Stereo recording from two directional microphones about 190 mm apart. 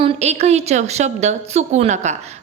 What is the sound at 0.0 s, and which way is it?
A woman's voice, 35° right (ahead or behind).